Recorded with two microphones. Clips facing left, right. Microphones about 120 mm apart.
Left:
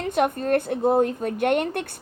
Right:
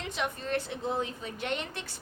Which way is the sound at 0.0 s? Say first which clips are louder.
Left 12 dB; 50° left (ahead or behind).